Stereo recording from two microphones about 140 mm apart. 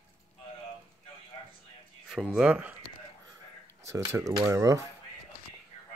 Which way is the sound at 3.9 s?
20° right (ahead or behind).